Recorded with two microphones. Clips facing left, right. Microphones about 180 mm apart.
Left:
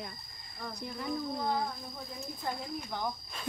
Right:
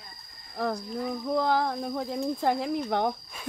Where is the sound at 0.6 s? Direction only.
80° right.